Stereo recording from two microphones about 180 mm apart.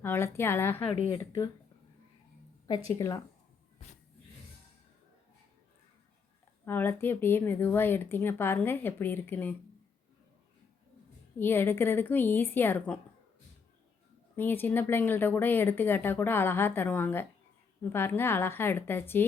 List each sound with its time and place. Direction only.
0.0 s speech: 15° left (ahead or behind)
0.8 s speech: 35° left (ahead or behind)
2.6 s a woman's voice: 20° left (ahead or behind)
6.7 s speech: 10° left (ahead or behind)
11.3 s speech: 10° left (ahead or behind)
14.3 s speech: 10° left (ahead or behind)